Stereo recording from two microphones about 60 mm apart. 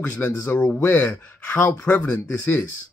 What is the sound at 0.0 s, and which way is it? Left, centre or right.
Speech, left.